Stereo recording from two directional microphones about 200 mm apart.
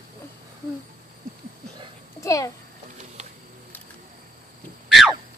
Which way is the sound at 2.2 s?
15° left (ahead or behind).